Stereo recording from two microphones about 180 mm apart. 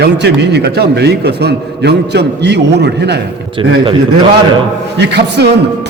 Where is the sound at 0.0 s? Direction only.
70° right (ahead or behind).